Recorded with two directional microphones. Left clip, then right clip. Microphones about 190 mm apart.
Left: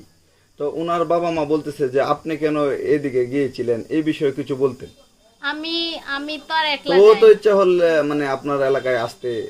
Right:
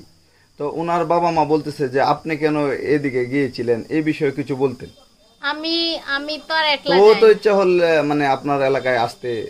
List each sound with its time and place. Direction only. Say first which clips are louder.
0.6 s a man's voice: right 1 dB; 35° right (ahead or behind)
5.4 s a woman's voice: right 2 dB; 10° right (ahead or behind)
7.3 s a man's voice: left 1 dB; 35° right (ahead or behind)